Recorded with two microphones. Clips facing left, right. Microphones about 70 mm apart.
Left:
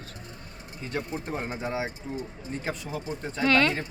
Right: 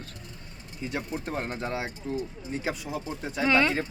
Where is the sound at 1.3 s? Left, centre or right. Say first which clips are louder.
Right 1 dB; centre.